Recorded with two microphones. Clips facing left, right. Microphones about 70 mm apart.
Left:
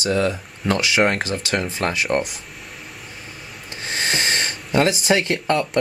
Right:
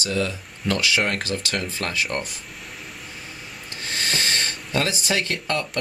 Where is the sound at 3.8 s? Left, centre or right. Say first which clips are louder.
Left 3 dB; left.